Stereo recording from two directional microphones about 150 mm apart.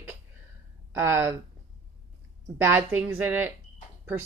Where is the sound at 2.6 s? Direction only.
15° right (ahead or behind).